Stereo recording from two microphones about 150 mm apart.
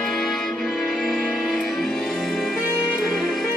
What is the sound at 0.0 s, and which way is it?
Music, centre (ahead or behind).